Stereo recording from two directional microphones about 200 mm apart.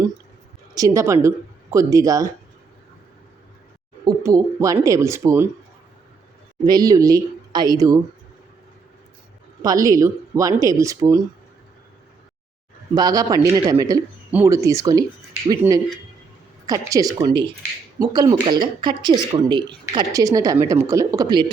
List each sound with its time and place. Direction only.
0.7 s a man's voice: 15° right (ahead or behind)
4.0 s a man's voice: 20° right (ahead or behind)
6.7 s a man's voice: 20° right (ahead or behind)
9.6 s a man's voice: 15° right (ahead or behind)
12.9 s a man's voice: 20° right (ahead or behind)